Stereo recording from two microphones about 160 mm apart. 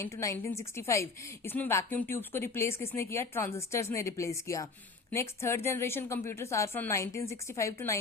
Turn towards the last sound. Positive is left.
turn(degrees=20)  # may be behind; listen again after turning